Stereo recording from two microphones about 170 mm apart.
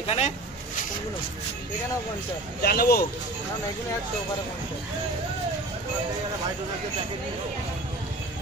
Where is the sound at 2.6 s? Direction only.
65° left (ahead or behind).